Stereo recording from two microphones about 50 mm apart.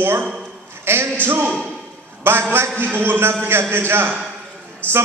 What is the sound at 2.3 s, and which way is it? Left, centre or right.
A man's voice, right.